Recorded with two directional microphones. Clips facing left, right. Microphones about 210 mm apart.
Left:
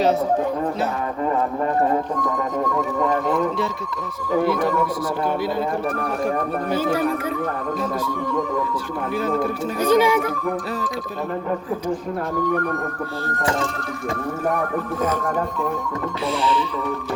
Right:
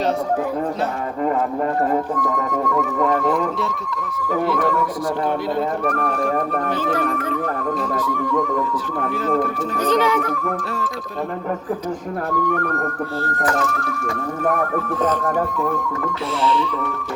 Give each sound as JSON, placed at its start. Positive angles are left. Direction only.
{"t": 6.7, "sound": "music", "side_deg": 10}
{"t": 9.7, "sound": "music", "side_deg": 10}
{"t": 13.4, "sound": "speech", "side_deg": 25}
{"t": 16.4, "sound": "music", "side_deg": 0}